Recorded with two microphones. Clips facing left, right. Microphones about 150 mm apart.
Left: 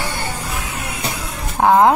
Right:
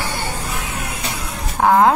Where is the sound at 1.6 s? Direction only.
15° left (ahead or behind).